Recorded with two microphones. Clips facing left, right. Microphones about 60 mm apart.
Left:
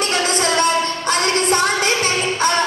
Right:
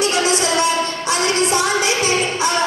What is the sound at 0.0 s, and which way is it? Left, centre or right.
Music, left.